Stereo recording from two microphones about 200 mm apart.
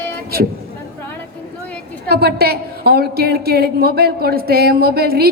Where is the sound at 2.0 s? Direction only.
55° right (ahead or behind).